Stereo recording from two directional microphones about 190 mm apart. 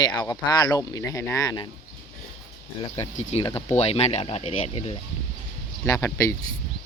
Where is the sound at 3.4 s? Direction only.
25° left (ahead or behind).